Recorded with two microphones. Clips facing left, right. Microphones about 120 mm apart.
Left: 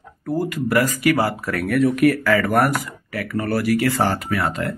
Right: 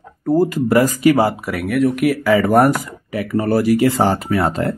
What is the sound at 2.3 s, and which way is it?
Speech, 20° right (ahead or behind).